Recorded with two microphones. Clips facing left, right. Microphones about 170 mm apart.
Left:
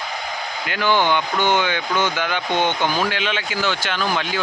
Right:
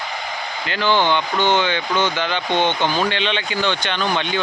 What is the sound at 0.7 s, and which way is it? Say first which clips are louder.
Speech: right 1 dB; 10° left (ahead or behind).